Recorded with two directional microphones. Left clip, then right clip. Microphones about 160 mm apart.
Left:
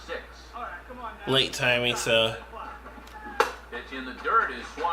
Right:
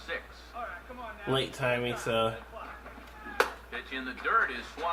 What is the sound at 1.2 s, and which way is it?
A man's voice, 15° right (ahead or behind).